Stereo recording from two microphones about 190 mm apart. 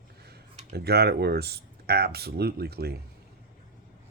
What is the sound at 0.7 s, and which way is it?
Speech, 55° right (ahead or behind).